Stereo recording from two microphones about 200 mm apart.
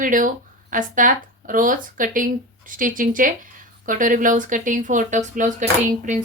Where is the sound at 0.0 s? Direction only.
40° right (ahead or behind).